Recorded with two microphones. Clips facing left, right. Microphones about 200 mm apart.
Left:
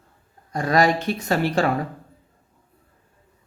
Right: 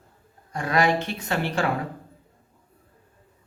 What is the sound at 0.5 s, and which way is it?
Speech, 35° left (ahead or behind).